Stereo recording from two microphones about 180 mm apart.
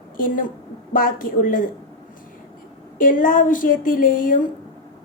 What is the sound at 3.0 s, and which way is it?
Speech, 50° left (ahead or behind).